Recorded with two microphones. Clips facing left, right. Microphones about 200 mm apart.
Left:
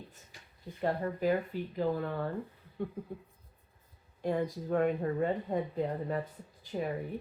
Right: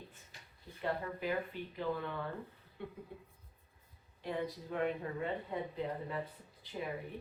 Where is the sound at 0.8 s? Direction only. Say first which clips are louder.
Left 6 dB; 40° left (ahead or behind).